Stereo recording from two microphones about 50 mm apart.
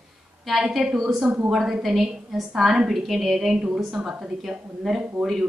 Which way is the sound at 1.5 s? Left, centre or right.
Centre.